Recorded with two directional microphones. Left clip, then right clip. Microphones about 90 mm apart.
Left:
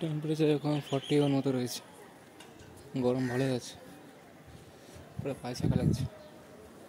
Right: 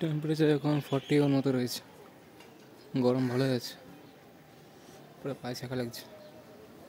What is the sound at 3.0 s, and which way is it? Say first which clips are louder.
Speech: right 2 dB; 75° right (ahead or behind).